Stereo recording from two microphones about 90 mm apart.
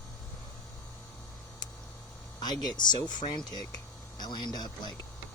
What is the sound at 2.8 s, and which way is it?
Speech, 55° left (ahead or behind).